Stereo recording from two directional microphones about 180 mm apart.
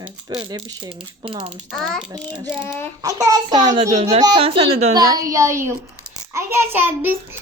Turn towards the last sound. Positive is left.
turn(degrees=-10)  # may be behind; listen again after turning